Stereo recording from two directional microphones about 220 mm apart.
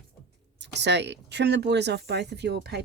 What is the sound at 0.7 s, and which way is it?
Speech, 50° right (ahead or behind).